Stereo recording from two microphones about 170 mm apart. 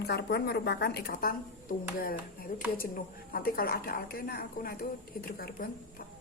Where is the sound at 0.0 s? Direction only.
75° left (ahead or behind); by 1.7 s 60° left (ahead or behind).